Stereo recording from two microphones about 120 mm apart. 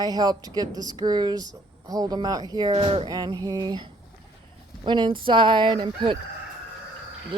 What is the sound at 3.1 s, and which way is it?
Speech, 35° right (ahead or behind).